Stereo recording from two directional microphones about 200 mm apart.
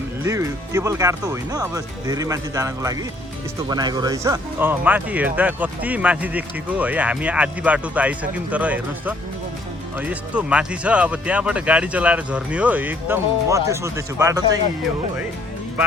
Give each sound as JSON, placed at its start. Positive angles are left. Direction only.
{"t": 0.2, "sound": "speech", "side_deg": -15}